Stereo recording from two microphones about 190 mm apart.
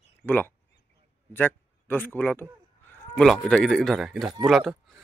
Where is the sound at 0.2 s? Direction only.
10° left (ahead or behind).